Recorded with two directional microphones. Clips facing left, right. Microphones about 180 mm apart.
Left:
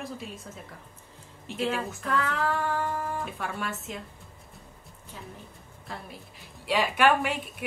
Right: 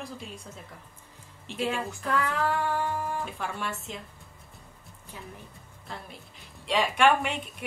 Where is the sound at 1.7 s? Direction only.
Centre (ahead or behind).